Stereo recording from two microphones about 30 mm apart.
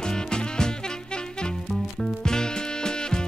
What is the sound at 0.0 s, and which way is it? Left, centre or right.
Music, left.